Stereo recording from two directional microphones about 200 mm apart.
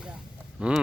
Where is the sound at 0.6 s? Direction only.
5° right (ahead or behind).